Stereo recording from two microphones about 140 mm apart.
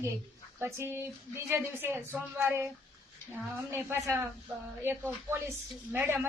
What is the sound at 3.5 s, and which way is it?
Speech, 20° right (ahead or behind).